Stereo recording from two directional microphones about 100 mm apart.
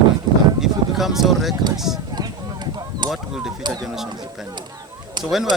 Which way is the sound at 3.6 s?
45° right (ahead or behind).